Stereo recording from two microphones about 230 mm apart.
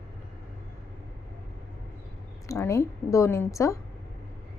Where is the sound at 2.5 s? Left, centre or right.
Centre.